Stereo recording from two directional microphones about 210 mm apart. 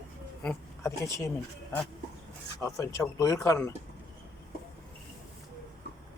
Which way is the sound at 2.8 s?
15° left (ahead or behind).